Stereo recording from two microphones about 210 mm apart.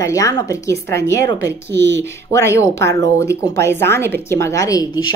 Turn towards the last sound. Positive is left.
turn(degrees=15)  # may be behind; listen again after turning